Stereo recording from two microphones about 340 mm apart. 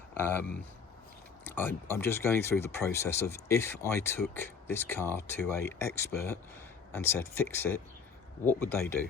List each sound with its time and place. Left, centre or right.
0.1 s speech: centre
1.5 s speech: centre